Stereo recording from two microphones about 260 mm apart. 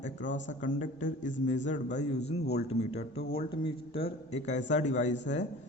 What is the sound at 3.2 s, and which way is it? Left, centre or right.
Speech, left.